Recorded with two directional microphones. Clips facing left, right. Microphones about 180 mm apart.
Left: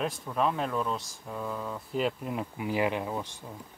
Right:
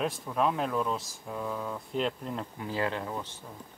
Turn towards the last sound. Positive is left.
turn(degrees=15)  # may be behind; listen again after turning